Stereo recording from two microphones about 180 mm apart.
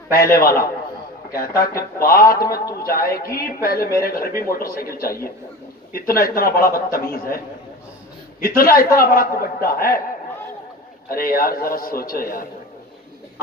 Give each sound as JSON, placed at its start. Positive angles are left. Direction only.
{"t": 0.1, "sound": "a man's voice", "side_deg": 55}
{"t": 2.0, "sound": "a man's voice", "side_deg": 55}
{"t": 2.4, "sound": "a man's voice", "side_deg": 20}
{"t": 2.8, "sound": "a man's voice", "side_deg": 55}
{"t": 11.1, "sound": "a man's voice", "side_deg": 55}